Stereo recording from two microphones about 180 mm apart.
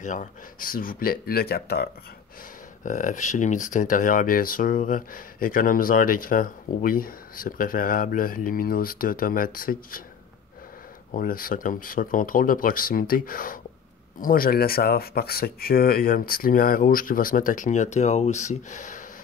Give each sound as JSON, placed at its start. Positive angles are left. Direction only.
{"t": 0.0, "sound": "speech", "side_deg": 45}
{"t": 2.8, "sound": "speech", "side_deg": 45}
{"t": 11.1, "sound": "speech", "side_deg": 50}